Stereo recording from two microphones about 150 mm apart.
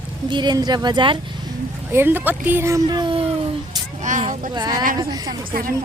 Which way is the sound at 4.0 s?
55° right (ahead or behind).